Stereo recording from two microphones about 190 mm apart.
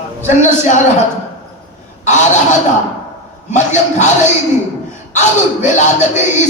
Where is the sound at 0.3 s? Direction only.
40° left (ahead or behind).